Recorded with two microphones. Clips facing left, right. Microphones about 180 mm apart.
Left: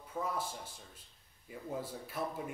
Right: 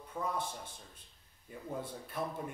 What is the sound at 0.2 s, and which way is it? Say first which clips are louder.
Speech: even; 15° left (ahead or behind).